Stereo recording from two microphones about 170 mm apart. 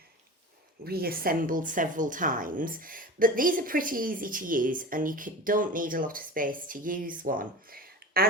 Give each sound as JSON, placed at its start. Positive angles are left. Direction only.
{"t": 0.9, "sound": "speech", "side_deg": -60}